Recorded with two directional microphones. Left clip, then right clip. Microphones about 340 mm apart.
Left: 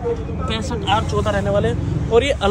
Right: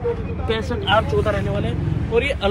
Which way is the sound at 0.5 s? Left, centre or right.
Centre.